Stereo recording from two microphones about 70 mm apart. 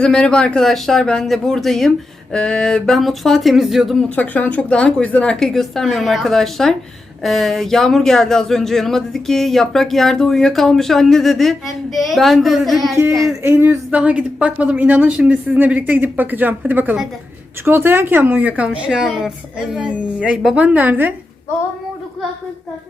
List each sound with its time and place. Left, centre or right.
0.0 s speech: centre
4.1 s speech: left; by 13.0 s centre
13.2 s speech: right
14.0 s speech: centre
18.9 s speech: centre; by 21.1 s right